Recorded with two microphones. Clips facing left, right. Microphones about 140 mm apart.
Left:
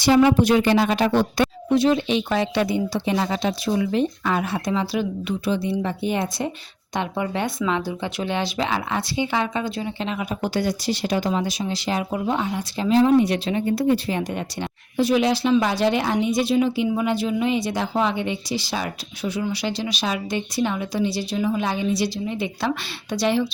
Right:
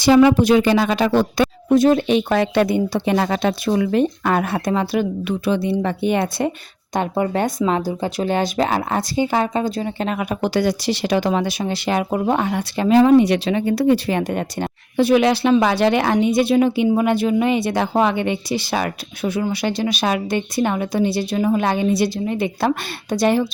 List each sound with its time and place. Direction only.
1.7 s speech: 50° right (ahead or behind)
6.9 s speech: 45° right (ahead or behind)